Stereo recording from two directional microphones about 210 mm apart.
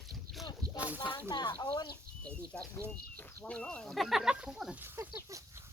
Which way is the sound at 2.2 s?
5° left (ahead or behind).